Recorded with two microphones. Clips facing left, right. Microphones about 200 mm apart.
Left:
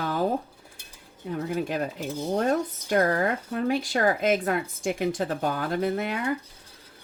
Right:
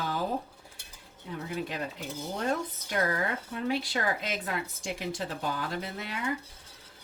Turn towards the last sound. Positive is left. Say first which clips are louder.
# left 10 dB
turn(degrees=50)  # may be behind; listen again after turning